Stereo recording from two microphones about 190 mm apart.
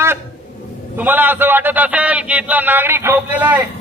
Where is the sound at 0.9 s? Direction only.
10° right (ahead or behind).